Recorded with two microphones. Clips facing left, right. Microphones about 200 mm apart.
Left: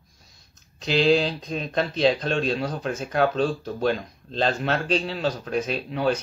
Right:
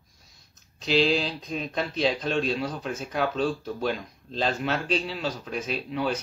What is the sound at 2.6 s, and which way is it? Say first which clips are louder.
Speech: left 3 dB; 45° left (ahead or behind).